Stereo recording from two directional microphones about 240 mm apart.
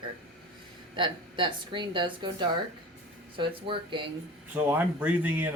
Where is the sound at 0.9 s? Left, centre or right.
Centre.